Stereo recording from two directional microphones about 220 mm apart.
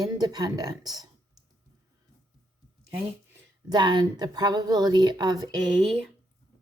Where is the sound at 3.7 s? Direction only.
20° right (ahead or behind).